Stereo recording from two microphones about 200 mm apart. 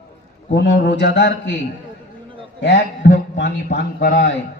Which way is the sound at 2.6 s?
60° left (ahead or behind).